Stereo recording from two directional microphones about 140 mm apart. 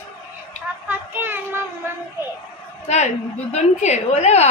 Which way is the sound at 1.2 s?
15° right (ahead or behind).